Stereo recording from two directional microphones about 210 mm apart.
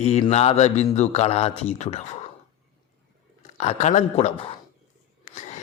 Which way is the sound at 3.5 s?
30° left (ahead or behind).